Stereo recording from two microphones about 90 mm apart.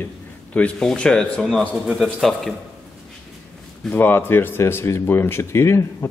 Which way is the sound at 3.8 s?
20° left (ahead or behind).